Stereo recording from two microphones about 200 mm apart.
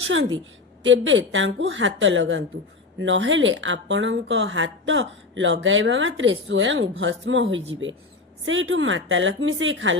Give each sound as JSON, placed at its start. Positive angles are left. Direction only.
{"t": 0.1, "sound": "speech", "side_deg": -70}